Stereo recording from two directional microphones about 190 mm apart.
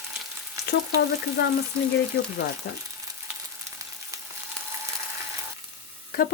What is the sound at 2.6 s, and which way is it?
Speech, 60° left (ahead or behind).